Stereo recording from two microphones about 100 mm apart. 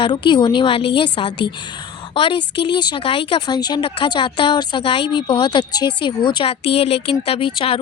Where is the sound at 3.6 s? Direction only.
45° left (ahead or behind).